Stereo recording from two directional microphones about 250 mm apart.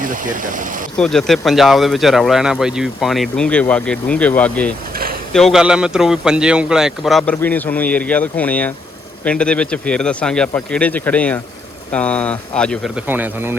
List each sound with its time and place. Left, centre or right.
0.0 s speech: right
0.9 s speech: centre
13.1 s speech: centre